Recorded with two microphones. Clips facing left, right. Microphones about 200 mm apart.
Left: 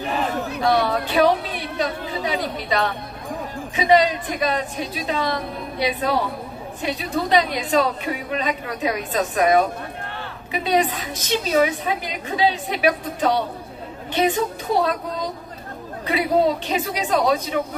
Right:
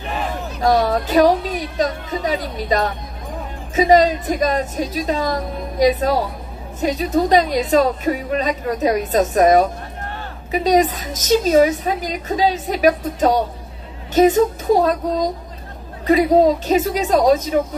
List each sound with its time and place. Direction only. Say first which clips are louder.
0.6 s a woman's voice: right 4 dB; 40° right (ahead or behind)